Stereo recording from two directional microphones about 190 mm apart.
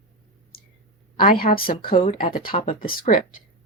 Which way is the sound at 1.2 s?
50° left (ahead or behind).